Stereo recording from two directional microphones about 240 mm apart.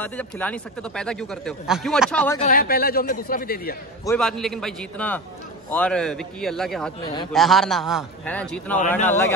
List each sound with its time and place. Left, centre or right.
0.0 s speech: centre
2.3 s speech: left
4.0 s speech: centre
7.0 s a man's voice: centre
7.3 s a man's voice: centre